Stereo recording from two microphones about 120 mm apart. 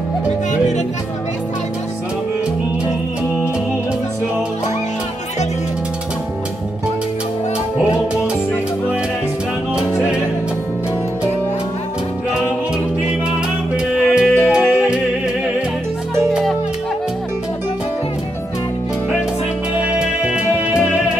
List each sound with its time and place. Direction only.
0.5 s music: 80° left
13.9 s music: 5° right (ahead or behind)
16.3 s music: centre (ahead or behind)
19.8 s music: 10° right (ahead or behind)